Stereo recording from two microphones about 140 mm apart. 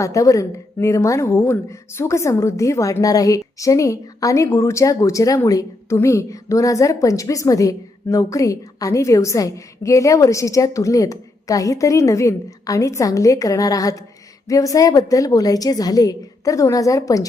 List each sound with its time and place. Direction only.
0.0 s a woman's voice: 25° left (ahead or behind)